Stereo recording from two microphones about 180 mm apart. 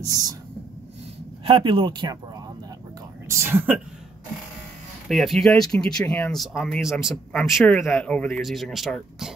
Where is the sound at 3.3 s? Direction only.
15° right (ahead or behind).